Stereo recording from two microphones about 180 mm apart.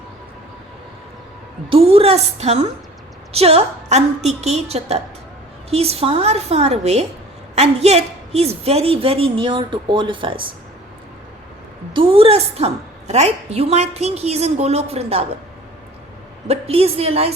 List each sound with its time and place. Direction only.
1.7 s a woman's voice: 30° right (ahead or behind)
11.9 s a woman's voice: 30° right (ahead or behind)
16.5 s a woman's voice: 35° right (ahead or behind)